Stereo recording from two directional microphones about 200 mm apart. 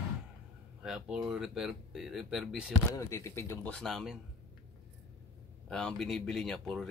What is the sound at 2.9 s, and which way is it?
Speech, 15° left (ahead or behind).